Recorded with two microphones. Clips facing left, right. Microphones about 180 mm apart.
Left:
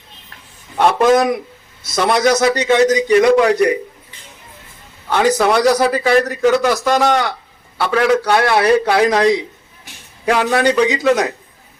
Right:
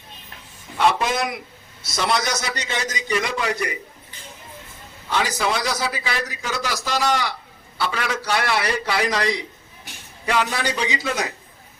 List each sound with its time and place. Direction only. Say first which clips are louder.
0.8 s a man's voice: left 8 dB; 55° left (ahead or behind)
5.0 s a man's voice: left 9 dB; 60° left (ahead or behind)
10.2 s a man's voice: left 8 dB; 65° left (ahead or behind)